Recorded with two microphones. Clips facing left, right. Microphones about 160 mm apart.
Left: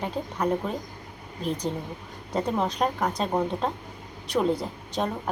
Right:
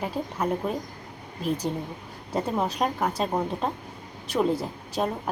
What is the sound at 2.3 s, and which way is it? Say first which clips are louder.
A woman's voice: even; 5° right (ahead or behind).